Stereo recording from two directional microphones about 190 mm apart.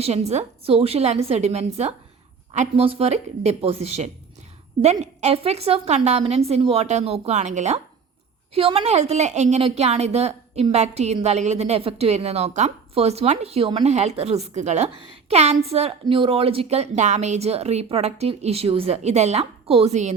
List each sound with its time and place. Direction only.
0.0 s a woman's voice: 35° right (ahead or behind)